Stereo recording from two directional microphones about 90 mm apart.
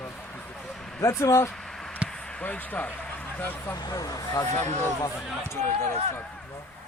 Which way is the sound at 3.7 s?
45° left (ahead or behind).